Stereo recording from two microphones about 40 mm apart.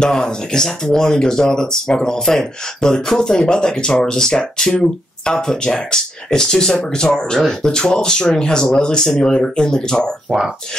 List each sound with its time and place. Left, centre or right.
0.0 s speech: centre